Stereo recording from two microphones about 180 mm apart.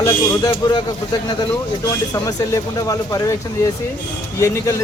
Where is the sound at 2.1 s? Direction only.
20° left (ahead or behind).